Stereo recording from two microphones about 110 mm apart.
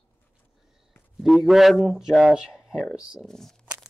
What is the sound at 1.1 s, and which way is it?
A man's voice, centre (ahead or behind).